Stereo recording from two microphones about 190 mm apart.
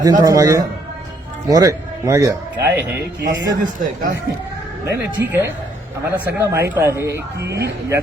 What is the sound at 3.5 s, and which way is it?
Speech, 45° right (ahead or behind).